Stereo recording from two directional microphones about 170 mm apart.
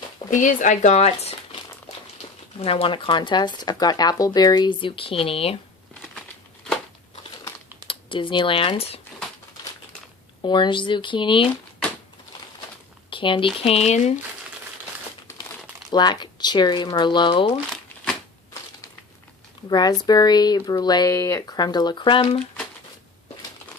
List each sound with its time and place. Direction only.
0.3 s speech: 50° left (ahead or behind)
7.9 s speech: 30° left (ahead or behind)
10.4 s speech: 30° left (ahead or behind)
13.1 s speech: 30° left (ahead or behind)
15.9 s speech: 25° left (ahead or behind)
19.7 s speech: 25° left (ahead or behind)